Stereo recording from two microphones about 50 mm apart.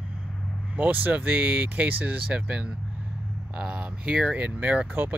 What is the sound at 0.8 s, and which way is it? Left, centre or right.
Speech, right.